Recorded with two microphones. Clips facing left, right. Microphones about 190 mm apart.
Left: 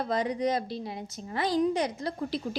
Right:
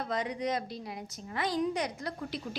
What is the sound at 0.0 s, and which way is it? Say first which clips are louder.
A woman's voice: left 5 dB; 35° left (ahead or behind).